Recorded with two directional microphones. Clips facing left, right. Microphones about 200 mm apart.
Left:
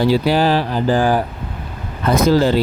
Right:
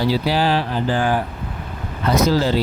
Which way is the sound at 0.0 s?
50° left (ahead or behind).